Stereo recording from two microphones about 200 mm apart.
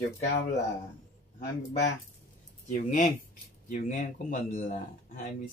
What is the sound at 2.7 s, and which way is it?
Speech, 40° left (ahead or behind).